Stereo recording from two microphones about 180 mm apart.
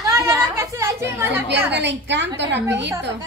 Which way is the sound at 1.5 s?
75° right (ahead or behind).